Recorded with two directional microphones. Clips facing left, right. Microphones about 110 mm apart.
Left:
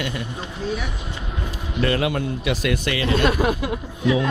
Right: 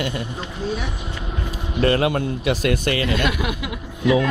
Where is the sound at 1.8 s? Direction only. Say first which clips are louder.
Right 3 dB; 40° right (ahead or behind).